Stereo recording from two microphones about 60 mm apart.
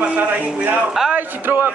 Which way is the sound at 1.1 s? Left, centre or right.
Right.